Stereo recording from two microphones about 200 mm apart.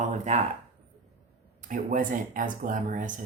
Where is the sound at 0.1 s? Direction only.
35° right (ahead or behind).